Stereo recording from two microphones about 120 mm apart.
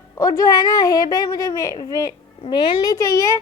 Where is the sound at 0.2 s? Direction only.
30° left (ahead or behind).